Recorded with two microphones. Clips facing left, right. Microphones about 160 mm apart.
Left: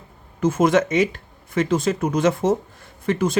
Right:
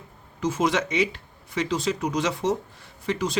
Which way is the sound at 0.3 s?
50° left (ahead or behind).